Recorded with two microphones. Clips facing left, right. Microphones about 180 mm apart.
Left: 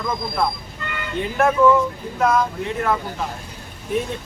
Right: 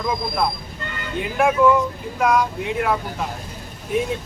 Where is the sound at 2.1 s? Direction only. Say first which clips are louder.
Even; 10° right (ahead or behind).